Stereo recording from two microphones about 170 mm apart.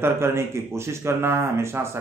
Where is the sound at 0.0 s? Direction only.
15° right (ahead or behind).